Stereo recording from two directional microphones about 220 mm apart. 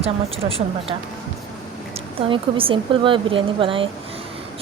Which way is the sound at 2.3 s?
25° right (ahead or behind).